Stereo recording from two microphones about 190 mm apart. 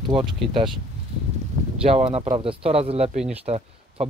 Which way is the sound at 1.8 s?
30° right (ahead or behind).